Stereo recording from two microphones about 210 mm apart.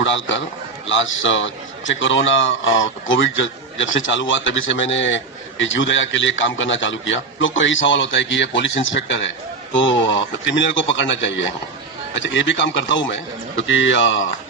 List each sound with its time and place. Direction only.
0.0 s a man's voice: 65° left (ahead or behind)